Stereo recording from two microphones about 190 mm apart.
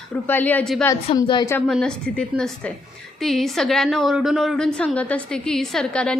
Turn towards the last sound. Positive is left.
turn(degrees=5)  # may be behind; listen again after turning